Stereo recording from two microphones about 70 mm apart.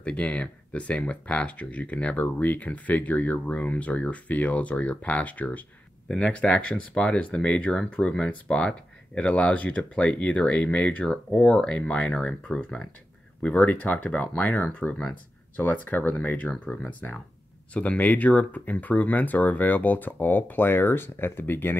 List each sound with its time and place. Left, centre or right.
0.0 s speech: centre